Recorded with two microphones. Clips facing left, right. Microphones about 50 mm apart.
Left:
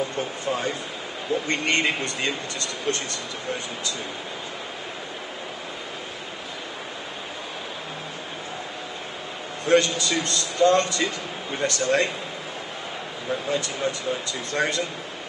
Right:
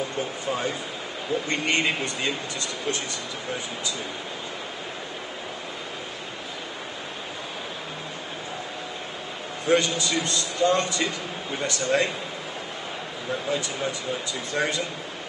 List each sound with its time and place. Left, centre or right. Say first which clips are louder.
0.2 s speech: left 1 dB; centre
9.7 s a man's voice: left 2 dB; centre
13.5 s speech: left 2 dB; centre